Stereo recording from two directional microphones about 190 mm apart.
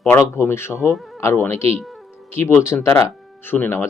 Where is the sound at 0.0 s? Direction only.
10° left (ahead or behind).